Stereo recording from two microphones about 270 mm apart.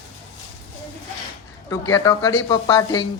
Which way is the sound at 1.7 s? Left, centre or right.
Centre.